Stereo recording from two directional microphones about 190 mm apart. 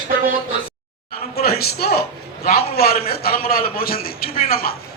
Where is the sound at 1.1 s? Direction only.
55° left (ahead or behind).